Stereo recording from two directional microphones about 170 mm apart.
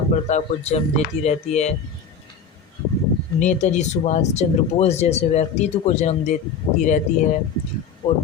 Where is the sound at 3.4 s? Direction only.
45° left (ahead or behind).